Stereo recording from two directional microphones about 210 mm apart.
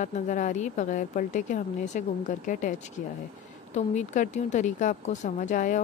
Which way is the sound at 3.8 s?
35° left (ahead or behind).